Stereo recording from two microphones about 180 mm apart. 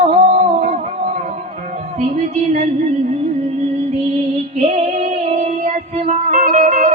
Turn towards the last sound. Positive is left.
turn(degrees=-40)  # may be behind; listen again after turning